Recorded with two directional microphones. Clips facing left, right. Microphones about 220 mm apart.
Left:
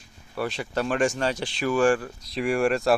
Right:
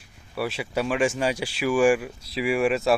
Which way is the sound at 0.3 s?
5° right (ahead or behind).